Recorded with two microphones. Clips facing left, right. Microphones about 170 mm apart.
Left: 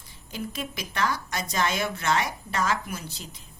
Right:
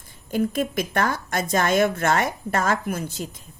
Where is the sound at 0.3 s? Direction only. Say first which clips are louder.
Right 11 dB; 50° right (ahead or behind).